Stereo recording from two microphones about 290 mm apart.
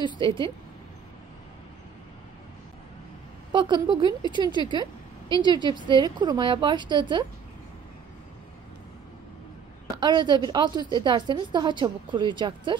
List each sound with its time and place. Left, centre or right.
0.0 s a woman's voice: centre
3.5 s a woman's voice: centre
9.9 s a woman's voice: centre